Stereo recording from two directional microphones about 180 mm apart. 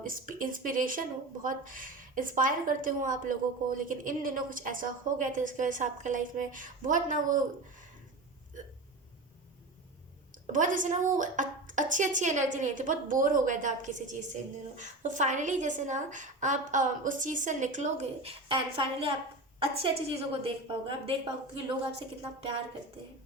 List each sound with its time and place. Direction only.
0.0 s speech: 50° right (ahead or behind)
10.4 s a woman's voice: 45° right (ahead or behind)